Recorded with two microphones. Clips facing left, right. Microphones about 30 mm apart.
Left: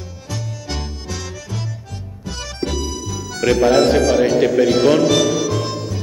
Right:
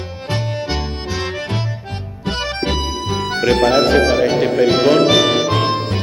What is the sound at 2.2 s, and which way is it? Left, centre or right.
Music, right.